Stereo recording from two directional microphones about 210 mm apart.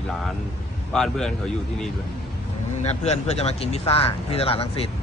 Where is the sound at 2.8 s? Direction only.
30° left (ahead or behind).